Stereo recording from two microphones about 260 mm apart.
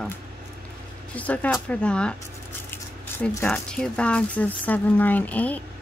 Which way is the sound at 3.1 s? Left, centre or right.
Centre.